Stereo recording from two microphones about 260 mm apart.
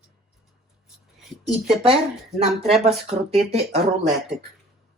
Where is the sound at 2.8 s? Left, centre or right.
Right.